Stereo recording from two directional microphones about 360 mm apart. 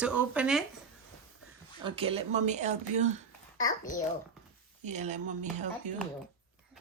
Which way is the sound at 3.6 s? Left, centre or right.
Left.